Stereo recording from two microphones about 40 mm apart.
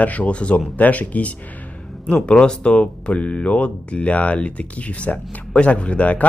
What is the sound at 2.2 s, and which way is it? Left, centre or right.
Speech, left.